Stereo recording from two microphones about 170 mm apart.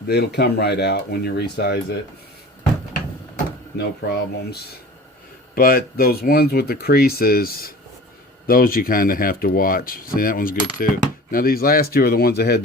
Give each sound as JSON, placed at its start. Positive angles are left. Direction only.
{"t": 0.1, "sound": "speech", "side_deg": 75}
{"t": 2.9, "sound": "a sound", "side_deg": 60}
{"t": 5.5, "sound": "speech", "side_deg": 60}